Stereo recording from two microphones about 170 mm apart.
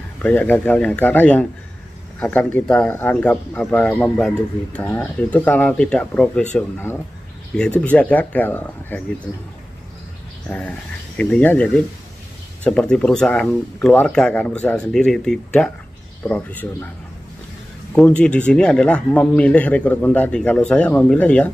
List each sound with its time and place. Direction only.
0.2 s speech: 10° left (ahead or behind)
10.5 s speech: 5° left (ahead or behind)
17.9 s speech: 5° left (ahead or behind)